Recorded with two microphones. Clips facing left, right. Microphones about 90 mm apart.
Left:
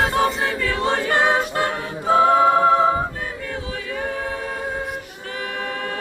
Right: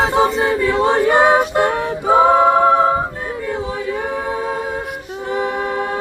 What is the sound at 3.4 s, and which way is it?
Choir, 15° right (ahead or behind).